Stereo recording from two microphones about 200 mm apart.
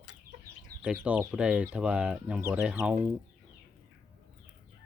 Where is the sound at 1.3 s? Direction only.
5° right (ahead or behind).